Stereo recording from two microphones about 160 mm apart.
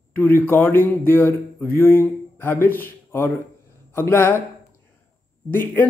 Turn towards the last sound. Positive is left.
turn(degrees=10)  # may be behind; listen again after turning